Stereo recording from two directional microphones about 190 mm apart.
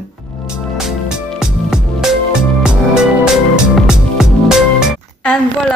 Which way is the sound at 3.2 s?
5° right (ahead or behind).